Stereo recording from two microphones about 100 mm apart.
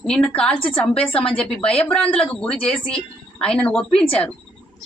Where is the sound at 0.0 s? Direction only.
10° left (ahead or behind).